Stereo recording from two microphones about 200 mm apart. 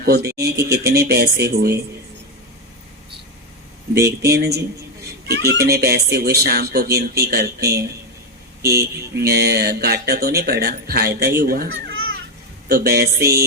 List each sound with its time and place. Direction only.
0.0 s speech: 50° right (ahead or behind)
4.2 s speech: 55° right (ahead or behind)